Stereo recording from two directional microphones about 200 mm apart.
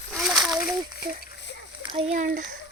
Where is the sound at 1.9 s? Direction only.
30° right (ahead or behind).